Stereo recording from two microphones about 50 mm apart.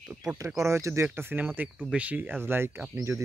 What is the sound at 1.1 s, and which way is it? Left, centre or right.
Speech, right.